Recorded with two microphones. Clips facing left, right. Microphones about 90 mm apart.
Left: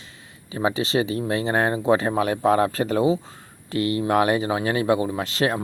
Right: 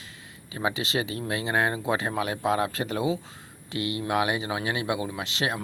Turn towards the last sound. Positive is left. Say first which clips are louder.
# left 6 dB
turn(degrees=40)  # may be behind; listen again after turning